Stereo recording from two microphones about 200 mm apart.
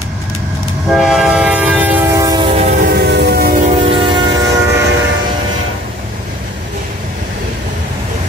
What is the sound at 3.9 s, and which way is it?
Train, 25° right (ahead or behind).